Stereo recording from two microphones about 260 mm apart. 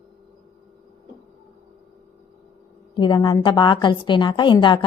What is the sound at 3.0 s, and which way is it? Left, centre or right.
A woman's voice, centre.